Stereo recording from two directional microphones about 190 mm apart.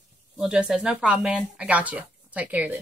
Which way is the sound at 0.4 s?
5° right (ahead or behind).